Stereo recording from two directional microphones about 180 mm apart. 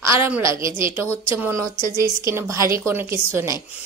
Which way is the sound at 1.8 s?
50° right (ahead or behind).